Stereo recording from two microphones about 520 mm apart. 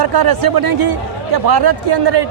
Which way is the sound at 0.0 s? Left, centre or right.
Right.